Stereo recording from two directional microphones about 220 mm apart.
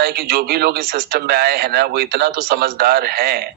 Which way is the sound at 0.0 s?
45° right (ahead or behind).